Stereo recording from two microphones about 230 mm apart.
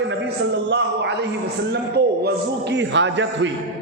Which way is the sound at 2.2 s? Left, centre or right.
Right.